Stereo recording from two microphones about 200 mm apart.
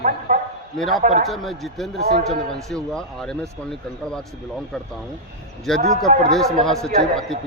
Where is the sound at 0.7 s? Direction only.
Centre (ahead or behind).